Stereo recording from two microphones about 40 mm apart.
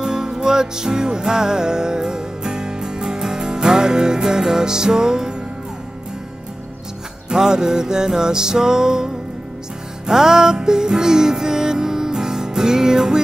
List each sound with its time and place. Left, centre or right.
0.0 s music: centre
7.2 s music: centre